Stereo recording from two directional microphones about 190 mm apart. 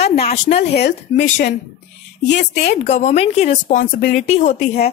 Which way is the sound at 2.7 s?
35° left (ahead or behind).